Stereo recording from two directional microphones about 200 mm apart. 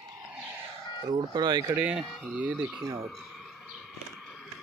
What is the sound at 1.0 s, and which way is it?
Speech, 20° right (ahead or behind).